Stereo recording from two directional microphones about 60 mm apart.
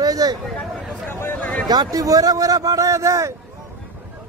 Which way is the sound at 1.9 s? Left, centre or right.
Right.